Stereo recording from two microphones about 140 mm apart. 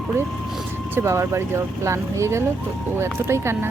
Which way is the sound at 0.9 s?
20° right (ahead or behind).